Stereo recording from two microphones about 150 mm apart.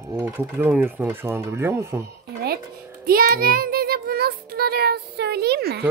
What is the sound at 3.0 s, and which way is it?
Speech, 85° right.